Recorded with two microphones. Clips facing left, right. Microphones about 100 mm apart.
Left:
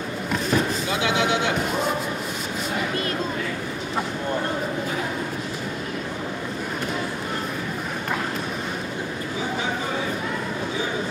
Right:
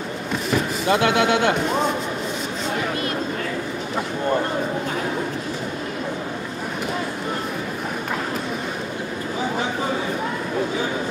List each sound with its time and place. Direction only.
0.8 s speech: 55° right (ahead or behind)